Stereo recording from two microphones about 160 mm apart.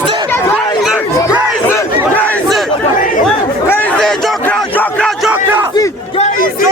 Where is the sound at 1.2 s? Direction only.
20° left (ahead or behind).